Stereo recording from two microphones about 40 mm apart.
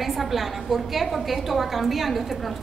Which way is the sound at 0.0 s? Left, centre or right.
Centre.